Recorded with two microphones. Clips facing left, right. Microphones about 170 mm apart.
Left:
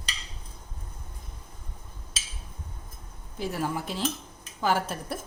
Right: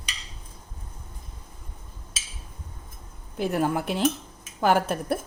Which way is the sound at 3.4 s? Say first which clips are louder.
Right 6 dB; 60° right (ahead or behind).